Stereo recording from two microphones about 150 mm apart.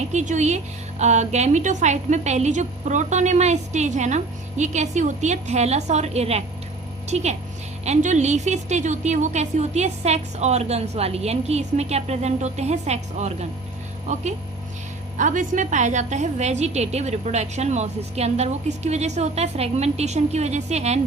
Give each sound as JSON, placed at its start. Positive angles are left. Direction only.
{"t": 0.1, "sound": "a woman's voice", "side_deg": -50}
{"t": 15.2, "sound": "a woman's voice", "side_deg": -55}